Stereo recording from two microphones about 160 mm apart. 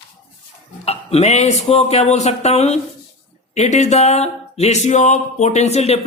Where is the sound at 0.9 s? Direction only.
40° left (ahead or behind).